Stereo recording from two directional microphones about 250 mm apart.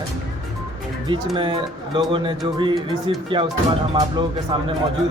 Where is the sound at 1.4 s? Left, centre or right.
Centre.